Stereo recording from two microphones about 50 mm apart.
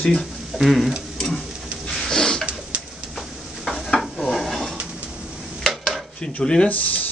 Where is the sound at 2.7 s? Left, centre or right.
Right.